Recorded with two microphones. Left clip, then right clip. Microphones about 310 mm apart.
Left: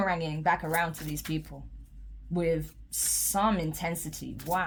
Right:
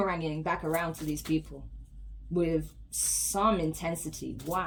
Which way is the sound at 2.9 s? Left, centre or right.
Left.